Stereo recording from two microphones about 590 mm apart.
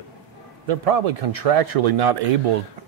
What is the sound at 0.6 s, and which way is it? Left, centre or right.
A man's voice, right.